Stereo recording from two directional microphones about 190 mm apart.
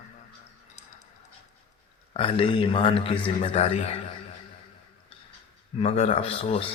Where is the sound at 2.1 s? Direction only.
30° left (ahead or behind).